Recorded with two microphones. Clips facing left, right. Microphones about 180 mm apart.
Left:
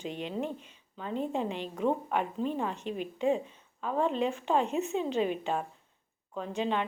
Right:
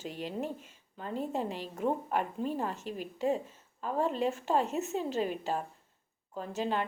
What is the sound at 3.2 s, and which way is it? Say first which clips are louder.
A woman's voice: left 2 dB; 40° right (ahead or behind).